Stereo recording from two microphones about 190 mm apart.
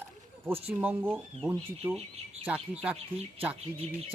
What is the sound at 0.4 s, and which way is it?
A man's voice, 10° right (ahead or behind).